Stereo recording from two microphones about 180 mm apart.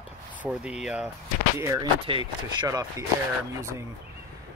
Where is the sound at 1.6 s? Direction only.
20° right (ahead or behind).